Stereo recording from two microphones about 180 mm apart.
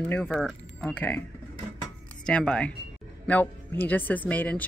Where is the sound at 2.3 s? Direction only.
5° left (ahead or behind).